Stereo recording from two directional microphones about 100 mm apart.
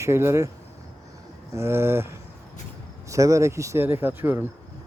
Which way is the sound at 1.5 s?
25° right (ahead or behind).